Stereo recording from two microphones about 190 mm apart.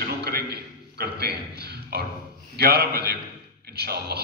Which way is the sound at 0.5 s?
55° right (ahead or behind).